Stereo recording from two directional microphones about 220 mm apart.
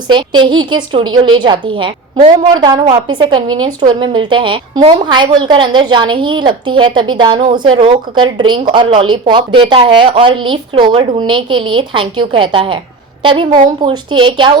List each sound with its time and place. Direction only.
0.1 s a woman's voice: 20° right (ahead or behind)